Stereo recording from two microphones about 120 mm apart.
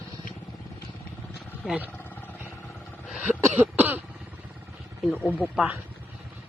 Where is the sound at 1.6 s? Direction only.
10° right (ahead or behind).